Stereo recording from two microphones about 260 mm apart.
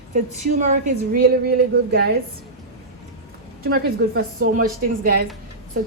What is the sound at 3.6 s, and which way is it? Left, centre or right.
Speech, right.